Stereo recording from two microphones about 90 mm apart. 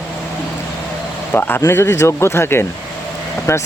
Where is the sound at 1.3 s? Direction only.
25° left (ahead or behind).